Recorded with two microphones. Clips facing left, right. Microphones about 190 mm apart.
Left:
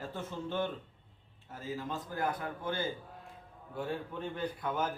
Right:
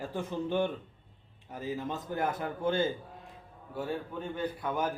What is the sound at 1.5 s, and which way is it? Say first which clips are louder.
A man's voice: right 4 dB; 20° right (ahead or behind).